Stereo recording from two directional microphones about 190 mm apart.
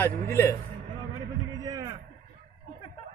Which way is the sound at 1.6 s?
20° right (ahead or behind).